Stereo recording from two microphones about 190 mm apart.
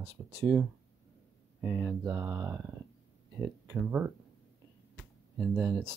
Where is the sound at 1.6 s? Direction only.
10° right (ahead or behind).